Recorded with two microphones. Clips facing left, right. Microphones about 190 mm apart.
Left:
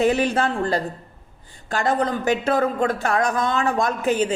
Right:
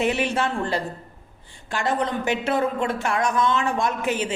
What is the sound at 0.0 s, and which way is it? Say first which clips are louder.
Speech: left 4 dB; 40° left (ahead or behind).